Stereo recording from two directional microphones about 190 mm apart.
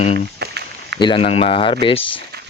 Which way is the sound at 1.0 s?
30° left (ahead or behind).